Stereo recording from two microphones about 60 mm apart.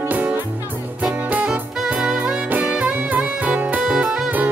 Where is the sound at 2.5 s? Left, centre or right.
Right.